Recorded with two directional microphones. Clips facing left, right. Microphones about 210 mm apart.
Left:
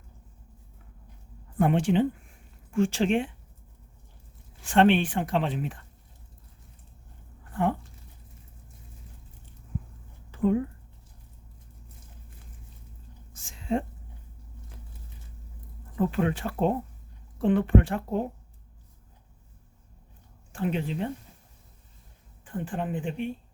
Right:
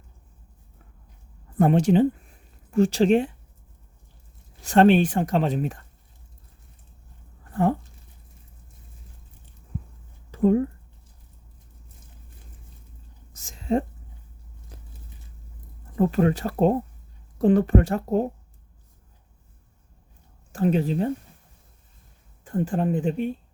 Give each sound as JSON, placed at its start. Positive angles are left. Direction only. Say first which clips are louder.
{"t": 1.5, "sound": "speech", "louder": "right 5 dB", "side_deg": -40}
{"t": 4.6, "sound": "speech", "louder": "right 4 dB", "side_deg": -40}
{"t": 7.5, "sound": "a sound", "louder": "right 4 dB", "side_deg": -40}
{"t": 10.3, "sound": "a sound", "louder": "right 5 dB", "side_deg": -40}
{"t": 13.3, "sound": "a sound", "louder": "right 5 dB", "side_deg": -40}
{"t": 14.7, "sound": "biting", "louder": "right 3 dB", "side_deg": -40}
{"t": 16.0, "sound": "speech", "louder": "right 5 dB", "side_deg": -40}
{"t": 20.5, "sound": "speech", "louder": "right 7 dB", "side_deg": -40}
{"t": 22.4, "sound": "speech", "louder": "right 7 dB", "side_deg": -40}